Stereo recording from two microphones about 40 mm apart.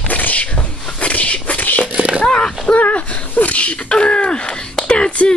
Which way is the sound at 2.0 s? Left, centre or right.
Right.